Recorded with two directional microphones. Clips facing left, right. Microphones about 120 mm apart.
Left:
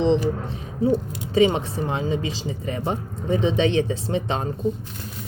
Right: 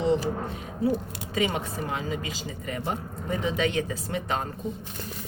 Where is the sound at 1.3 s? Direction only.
30° left (ahead or behind).